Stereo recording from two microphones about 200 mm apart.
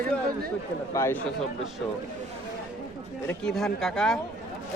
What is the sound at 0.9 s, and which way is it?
Speech, 15° left (ahead or behind).